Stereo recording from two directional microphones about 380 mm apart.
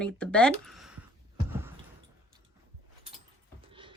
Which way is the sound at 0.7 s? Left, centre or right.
Centre.